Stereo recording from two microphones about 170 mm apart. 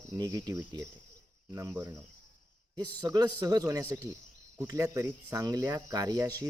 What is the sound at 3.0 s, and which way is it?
Speech, 20° right (ahead or behind).